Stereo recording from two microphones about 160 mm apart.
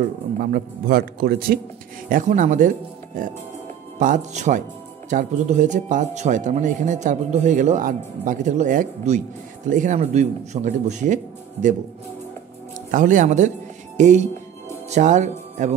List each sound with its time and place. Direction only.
0.4 s a man's voice: 70° right (ahead or behind)
2.0 s speech: 55° right (ahead or behind)
4.0 s speech: 50° right (ahead or behind)
12.9 s speech: 55° right (ahead or behind)